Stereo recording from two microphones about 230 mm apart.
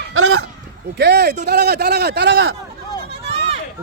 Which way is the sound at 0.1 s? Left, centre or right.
Right.